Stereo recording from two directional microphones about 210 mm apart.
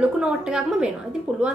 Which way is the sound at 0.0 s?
5° right (ahead or behind).